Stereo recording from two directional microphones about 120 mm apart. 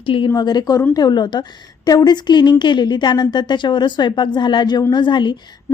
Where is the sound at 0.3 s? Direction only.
35° left (ahead or behind).